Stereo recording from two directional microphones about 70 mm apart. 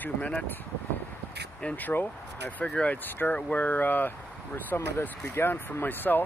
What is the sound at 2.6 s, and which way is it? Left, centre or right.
Speech, centre.